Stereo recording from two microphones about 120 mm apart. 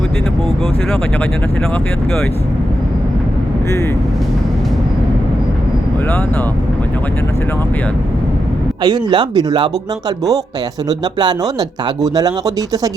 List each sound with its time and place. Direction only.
8.8 s speech: 35° right (ahead or behind)
10.8 s speech: 35° right (ahead or behind)